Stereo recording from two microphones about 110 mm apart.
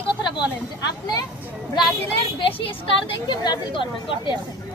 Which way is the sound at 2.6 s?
55° left (ahead or behind).